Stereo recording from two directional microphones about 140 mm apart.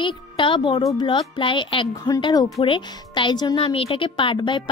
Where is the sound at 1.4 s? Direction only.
35° left (ahead or behind).